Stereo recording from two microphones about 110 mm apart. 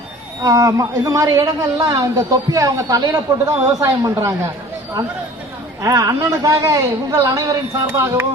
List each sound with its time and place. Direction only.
0.4 s a man's voice: 30° right (ahead or behind)
5.8 s a woman's voice: 30° right (ahead or behind)